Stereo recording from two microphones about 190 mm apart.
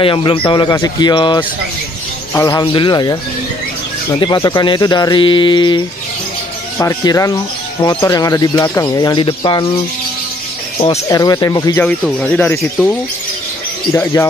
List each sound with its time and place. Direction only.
0.0 s speech: 25° left (ahead or behind)
6.8 s speech: 15° left (ahead or behind)
11.1 s speech: 20° left (ahead or behind)
11.8 s speech: 10° left (ahead or behind)